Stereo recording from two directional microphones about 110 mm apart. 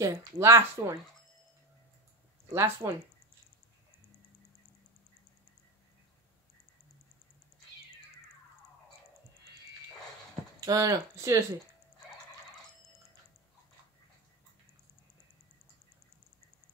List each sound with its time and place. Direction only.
0.0 s speech: 25° right (ahead or behind)
2.5 s speech: 25° right (ahead or behind)
10.6 s speech: 35° right (ahead or behind)